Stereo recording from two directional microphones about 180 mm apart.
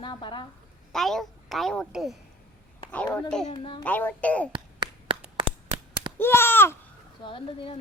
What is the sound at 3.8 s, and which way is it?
Speech, 10° left (ahead or behind).